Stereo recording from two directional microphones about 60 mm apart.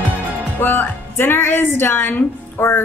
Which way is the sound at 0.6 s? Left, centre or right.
Left.